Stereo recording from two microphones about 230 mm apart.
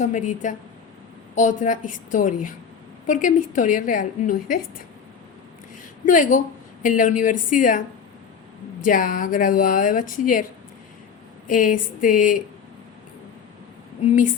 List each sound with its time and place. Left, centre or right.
0.0 s speech: left
6.1 s speech: left
8.8 s speech: left
11.4 s speech: left